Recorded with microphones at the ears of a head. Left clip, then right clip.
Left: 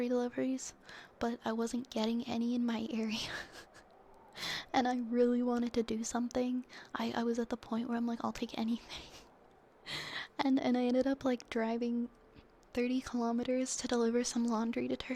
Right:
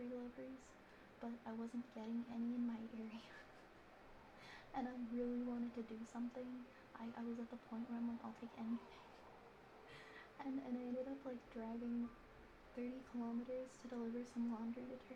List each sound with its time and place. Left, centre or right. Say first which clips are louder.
0.0 s a woman's voice: left 17 dB; left